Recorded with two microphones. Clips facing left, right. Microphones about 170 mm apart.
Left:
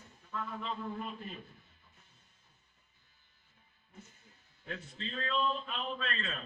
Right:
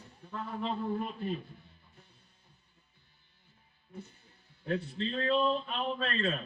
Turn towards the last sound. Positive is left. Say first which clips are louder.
# right 6 dB
turn(degrees=-35)  # may be behind; listen again after turning